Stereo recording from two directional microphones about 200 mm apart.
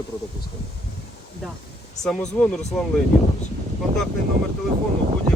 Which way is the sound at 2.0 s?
Centre (ahead or behind).